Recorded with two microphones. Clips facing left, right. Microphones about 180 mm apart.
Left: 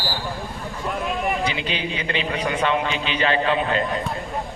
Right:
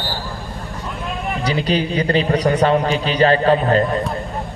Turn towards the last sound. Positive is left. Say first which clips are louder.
# right 6 dB
turn(degrees=-40)  # may be behind; listen again after turning